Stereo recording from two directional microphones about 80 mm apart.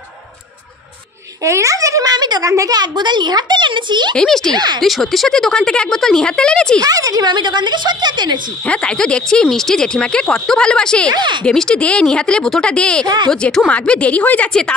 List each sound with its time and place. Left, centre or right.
1.4 s a sound: right
2.5 s speech: right
2.8 s a child's voice: right
4.2 s speech: centre
4.6 s speech: right
4.8 s speech: centre
6.8 s speech: right
7.2 s a woman's voice: right
8.6 s speech: centre
11.1 s speech: right
11.4 s speech: centre
13.0 s speech: right
13.3 s speech: centre